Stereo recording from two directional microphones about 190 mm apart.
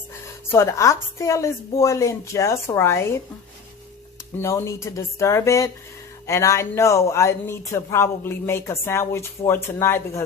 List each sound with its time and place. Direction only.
0.5 s speech: 15° left (ahead or behind)
4.4 s speech: 15° left (ahead or behind)